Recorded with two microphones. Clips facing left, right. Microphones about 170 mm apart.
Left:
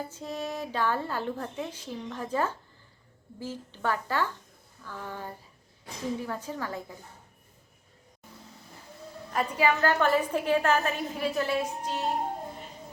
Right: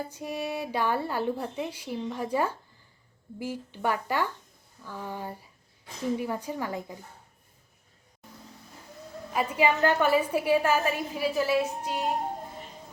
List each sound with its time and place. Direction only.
0.1 s speech: 10° right (ahead or behind)
9.6 s a woman's voice: 20° right (ahead or behind)
10.0 s speech: 10° right (ahead or behind)